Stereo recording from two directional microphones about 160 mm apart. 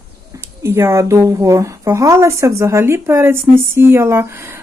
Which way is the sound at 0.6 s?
15° right (ahead or behind).